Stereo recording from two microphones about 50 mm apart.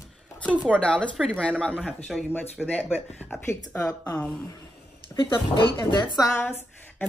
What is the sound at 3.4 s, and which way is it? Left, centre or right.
Speech, left.